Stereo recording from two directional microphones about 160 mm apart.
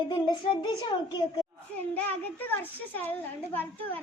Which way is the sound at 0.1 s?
30° left (ahead or behind).